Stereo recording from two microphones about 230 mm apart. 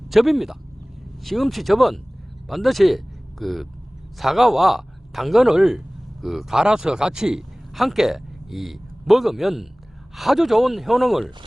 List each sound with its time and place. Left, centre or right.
0.1 s a man's voice: centre